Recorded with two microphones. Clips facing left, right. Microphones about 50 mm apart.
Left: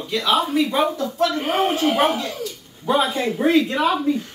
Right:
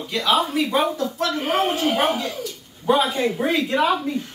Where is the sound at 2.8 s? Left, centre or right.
Centre.